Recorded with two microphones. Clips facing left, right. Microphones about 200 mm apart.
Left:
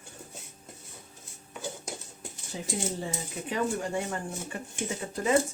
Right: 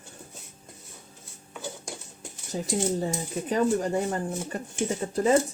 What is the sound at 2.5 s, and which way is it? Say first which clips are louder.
Speech: right 6 dB; 40° right (ahead or behind).